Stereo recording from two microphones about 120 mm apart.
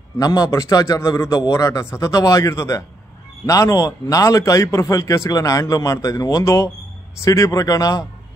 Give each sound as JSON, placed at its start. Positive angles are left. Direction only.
{"t": 0.2, "sound": "a man's voice", "side_deg": 30}